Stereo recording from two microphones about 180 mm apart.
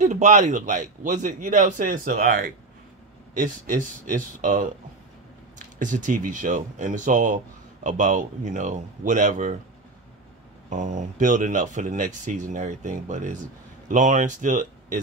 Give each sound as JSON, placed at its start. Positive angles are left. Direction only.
{"t": 0.0, "sound": "speech", "side_deg": -40}
{"t": 5.8, "sound": "speech", "side_deg": -45}
{"t": 10.7, "sound": "speech", "side_deg": -45}